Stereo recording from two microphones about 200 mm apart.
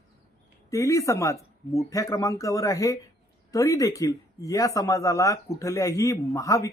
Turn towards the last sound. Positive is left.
turn(degrees=15)  # may be behind; listen again after turning